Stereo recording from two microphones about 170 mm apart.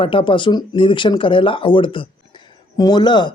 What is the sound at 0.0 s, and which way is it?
Speech, 30° left (ahead or behind).